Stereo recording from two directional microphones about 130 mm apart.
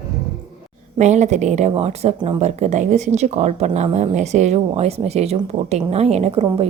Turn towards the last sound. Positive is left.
turn(degrees=-50)  # may be behind; listen again after turning